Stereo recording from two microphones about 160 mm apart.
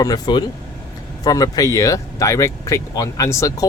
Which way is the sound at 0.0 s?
25° left (ahead or behind).